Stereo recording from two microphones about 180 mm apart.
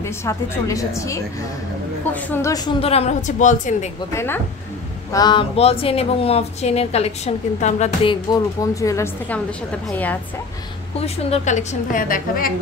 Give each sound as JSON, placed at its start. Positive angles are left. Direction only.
{"t": 0.0, "sound": "a woman's voice", "side_deg": 15}
{"t": 2.8, "sound": "a woman's voice", "side_deg": 35}
{"t": 4.1, "sound": "a woman's voice", "side_deg": 15}
{"t": 5.1, "sound": "a woman's voice", "side_deg": 25}
{"t": 11.0, "sound": "a woman's voice", "side_deg": 35}